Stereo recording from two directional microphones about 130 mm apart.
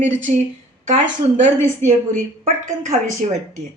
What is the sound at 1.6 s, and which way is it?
Speech, 90° right.